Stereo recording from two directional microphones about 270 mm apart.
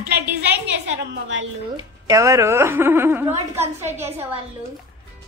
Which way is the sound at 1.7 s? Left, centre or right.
Centre.